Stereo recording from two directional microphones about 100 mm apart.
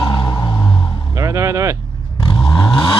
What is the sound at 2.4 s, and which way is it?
Vehicle, 45° left (ahead or behind).